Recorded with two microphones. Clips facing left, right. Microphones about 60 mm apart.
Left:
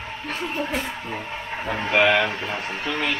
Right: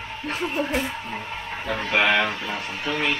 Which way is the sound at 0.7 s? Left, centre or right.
Centre.